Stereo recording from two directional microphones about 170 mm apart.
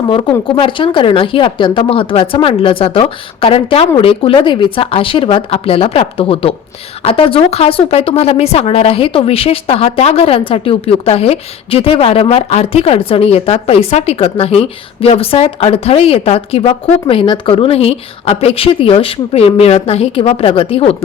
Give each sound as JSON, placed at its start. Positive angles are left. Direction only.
{"t": 0.1, "sound": "speech", "side_deg": 30}